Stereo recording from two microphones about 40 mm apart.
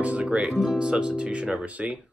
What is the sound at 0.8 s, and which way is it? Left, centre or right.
Speech, right.